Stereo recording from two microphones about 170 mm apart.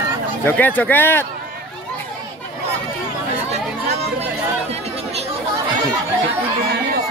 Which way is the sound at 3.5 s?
40° right (ahead or behind).